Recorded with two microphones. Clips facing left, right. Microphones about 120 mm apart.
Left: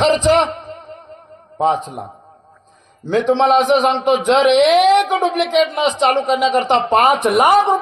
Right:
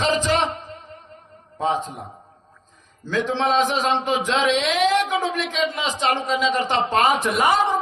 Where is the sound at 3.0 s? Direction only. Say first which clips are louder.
Left 8 dB; 20° left (ahead or behind).